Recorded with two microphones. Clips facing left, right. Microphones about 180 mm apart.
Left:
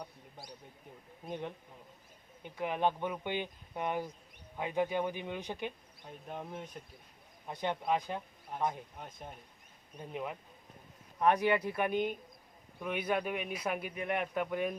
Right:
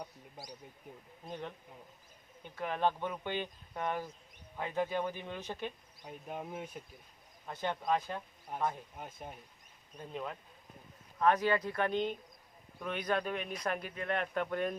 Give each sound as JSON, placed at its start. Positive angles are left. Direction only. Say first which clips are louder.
{"t": 1.3, "sound": "speech", "louder": "left 3 dB", "side_deg": 15}
{"t": 2.6, "sound": "speech", "louder": "left 1 dB", "side_deg": 15}
{"t": 6.1, "sound": "speech", "louder": "right 1 dB", "side_deg": -5}
{"t": 7.4, "sound": "speech", "louder": "left 1 dB", "side_deg": 15}
{"t": 9.0, "sound": "speech", "louder": "right 1 dB", "side_deg": -5}
{"t": 10.0, "sound": "speech", "louder": "left 1 dB", "side_deg": 15}